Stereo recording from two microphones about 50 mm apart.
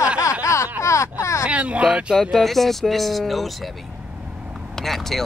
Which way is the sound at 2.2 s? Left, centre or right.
Centre.